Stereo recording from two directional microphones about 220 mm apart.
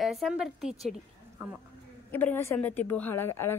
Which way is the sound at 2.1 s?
10° left (ahead or behind).